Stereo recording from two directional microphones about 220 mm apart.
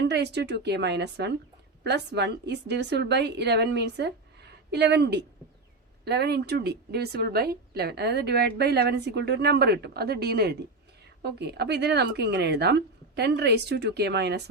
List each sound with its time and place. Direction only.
0.1 s a woman's voice: 50° right (ahead or behind)